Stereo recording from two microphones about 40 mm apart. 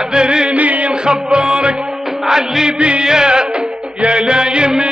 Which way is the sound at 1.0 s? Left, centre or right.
Right.